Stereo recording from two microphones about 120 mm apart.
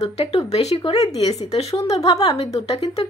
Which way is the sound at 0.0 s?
60° left (ahead or behind).